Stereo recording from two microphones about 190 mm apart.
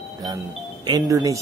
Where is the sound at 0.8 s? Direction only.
20° right (ahead or behind).